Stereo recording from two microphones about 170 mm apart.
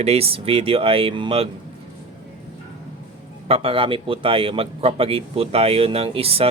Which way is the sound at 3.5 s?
30° right (ahead or behind).